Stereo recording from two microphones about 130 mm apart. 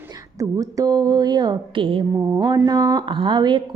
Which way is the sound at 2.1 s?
30° right (ahead or behind).